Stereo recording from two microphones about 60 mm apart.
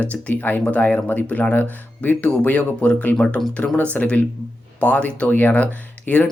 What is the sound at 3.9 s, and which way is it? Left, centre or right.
Speech, left.